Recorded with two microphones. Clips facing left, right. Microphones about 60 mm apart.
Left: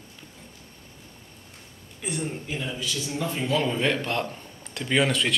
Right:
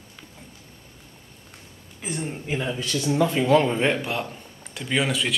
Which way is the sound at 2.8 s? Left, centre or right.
Right.